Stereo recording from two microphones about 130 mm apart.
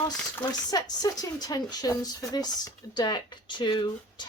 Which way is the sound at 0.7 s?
30° left (ahead or behind).